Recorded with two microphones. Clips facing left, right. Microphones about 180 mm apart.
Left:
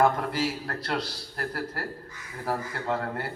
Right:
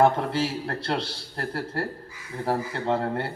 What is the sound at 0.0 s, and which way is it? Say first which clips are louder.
A man's voice: right 3 dB; 30° right (ahead or behind).